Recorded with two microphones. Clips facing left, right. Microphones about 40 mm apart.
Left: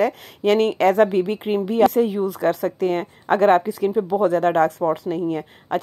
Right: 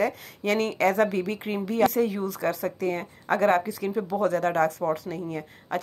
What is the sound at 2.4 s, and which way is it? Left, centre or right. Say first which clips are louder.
Speech: left 6 dB; left.